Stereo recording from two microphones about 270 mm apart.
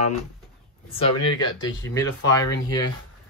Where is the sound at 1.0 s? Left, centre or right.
Centre.